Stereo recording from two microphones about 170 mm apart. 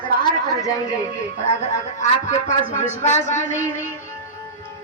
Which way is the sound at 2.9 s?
45° left (ahead or behind).